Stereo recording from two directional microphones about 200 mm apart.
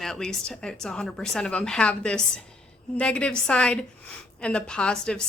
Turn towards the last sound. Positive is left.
turn(degrees=5)  # may be behind; listen again after turning